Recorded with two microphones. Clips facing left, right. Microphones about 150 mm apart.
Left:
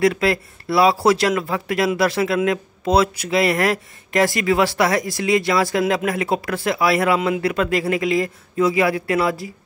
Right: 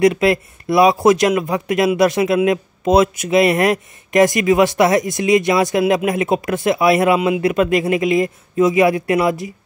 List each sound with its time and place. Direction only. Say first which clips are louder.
0.0 s speech: right 4 dB; 20° right (ahead or behind)